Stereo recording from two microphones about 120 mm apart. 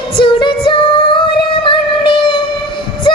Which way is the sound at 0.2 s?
45° left (ahead or behind).